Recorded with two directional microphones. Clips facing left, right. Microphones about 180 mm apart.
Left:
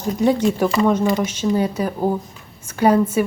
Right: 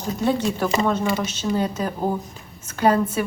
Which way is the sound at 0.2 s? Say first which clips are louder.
Left 5 dB; 15° left (ahead or behind).